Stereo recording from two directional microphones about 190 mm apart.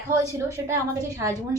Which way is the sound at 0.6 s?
15° right (ahead or behind).